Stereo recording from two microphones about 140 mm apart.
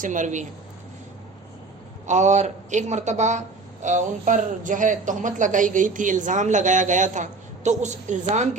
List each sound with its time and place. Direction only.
0.0 s speech: 65° right (ahead or behind)
2.0 s speech: 55° right (ahead or behind)